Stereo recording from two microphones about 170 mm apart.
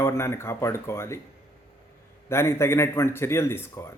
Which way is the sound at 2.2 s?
15° left (ahead or behind).